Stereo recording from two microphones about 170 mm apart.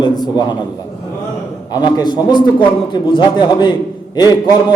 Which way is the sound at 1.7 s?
25° left (ahead or behind).